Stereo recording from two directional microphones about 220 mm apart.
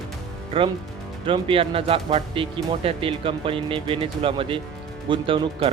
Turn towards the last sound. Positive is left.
turn(degrees=-25)  # may be behind; listen again after turning